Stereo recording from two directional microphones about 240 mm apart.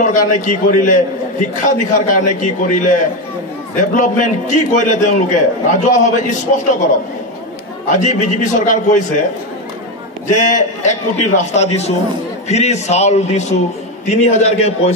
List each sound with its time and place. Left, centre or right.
0.0 s a man's voice: left
7.9 s a man's voice: left
10.2 s a man's voice: left